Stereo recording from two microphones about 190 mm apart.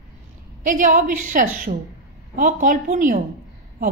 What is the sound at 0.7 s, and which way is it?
A woman's voice, 45° right (ahead or behind).